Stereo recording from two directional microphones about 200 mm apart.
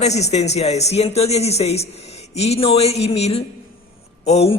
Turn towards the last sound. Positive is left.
turn(degrees=30)  # may be behind; listen again after turning